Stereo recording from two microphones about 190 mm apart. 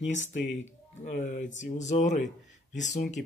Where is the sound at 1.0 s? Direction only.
40° left (ahead or behind).